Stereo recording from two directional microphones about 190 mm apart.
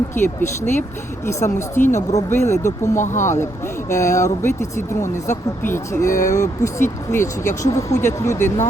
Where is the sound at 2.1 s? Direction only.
15° left (ahead or behind).